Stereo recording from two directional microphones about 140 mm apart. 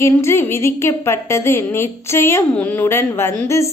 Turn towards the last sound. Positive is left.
turn(degrees=20)  # may be behind; listen again after turning